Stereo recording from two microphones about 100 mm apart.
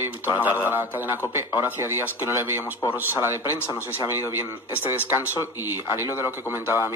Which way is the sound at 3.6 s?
25° left (ahead or behind).